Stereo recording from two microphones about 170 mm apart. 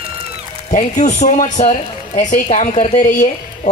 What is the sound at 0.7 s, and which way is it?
A man's voice, 45° left (ahead or behind).